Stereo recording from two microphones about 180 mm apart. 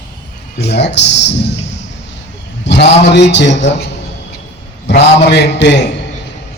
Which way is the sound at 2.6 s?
75° left (ahead or behind).